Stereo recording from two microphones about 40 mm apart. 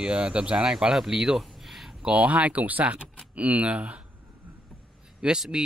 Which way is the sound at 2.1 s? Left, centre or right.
Right.